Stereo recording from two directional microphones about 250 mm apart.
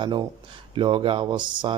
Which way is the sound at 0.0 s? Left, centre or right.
Centre.